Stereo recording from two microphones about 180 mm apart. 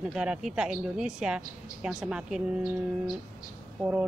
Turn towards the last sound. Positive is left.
turn(degrees=-5)  # may be behind; listen again after turning